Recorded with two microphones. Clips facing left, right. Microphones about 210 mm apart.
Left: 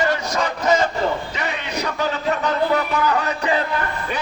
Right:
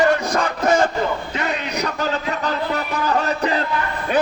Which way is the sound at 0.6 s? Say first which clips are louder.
Right 1 dB; 50° right (ahead or behind).